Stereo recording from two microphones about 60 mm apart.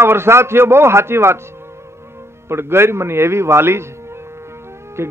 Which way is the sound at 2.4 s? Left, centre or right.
Right.